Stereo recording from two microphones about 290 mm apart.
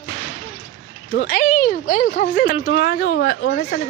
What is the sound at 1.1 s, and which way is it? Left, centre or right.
Speech, left.